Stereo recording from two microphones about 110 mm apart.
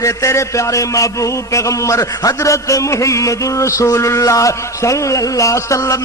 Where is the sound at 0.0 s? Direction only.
25° left (ahead or behind).